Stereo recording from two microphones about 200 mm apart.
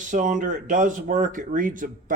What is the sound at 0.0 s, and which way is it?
Speech, 40° right (ahead or behind).